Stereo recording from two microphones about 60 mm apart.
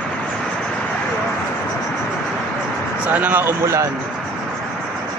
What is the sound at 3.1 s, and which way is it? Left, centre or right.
Speech, right.